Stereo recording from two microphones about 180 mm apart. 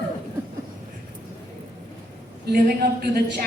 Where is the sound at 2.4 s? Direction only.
60° right (ahead or behind).